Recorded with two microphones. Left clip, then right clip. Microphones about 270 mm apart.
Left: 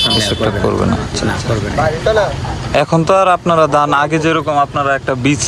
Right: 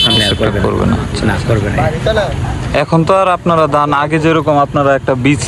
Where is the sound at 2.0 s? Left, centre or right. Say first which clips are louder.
Left 1 dB; left.